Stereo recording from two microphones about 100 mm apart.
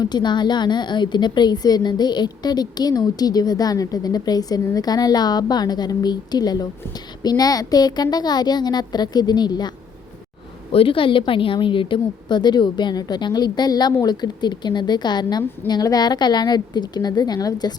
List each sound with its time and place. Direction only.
0.0 s a woman's voice: 45° left (ahead or behind)
10.7 s a woman's voice: 65° left (ahead or behind); by 17.7 s 40° left (ahead or behind)